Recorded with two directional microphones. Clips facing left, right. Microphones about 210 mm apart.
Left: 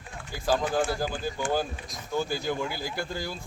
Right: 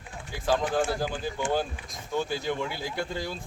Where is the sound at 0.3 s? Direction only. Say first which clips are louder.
Even; centre (ahead or behind).